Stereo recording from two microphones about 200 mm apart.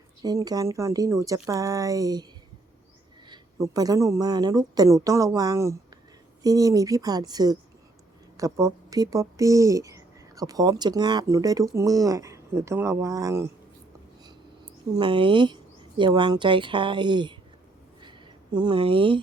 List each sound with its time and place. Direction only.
0.2 s speech: 20° right (ahead or behind)
3.2 s a woman's voice: 20° right (ahead or behind)
14.9 s speech: 25° right (ahead or behind)
18.0 s a sound: 20° right (ahead or behind)